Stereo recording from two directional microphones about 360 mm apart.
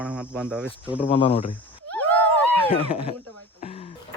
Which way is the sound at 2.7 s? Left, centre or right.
Centre.